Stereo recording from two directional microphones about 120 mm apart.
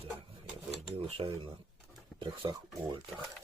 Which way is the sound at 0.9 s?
50° right (ahead or behind).